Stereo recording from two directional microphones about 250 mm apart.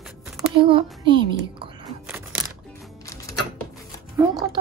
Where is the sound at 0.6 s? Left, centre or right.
Centre.